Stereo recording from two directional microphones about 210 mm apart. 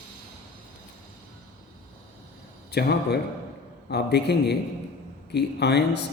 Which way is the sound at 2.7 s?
50° left (ahead or behind).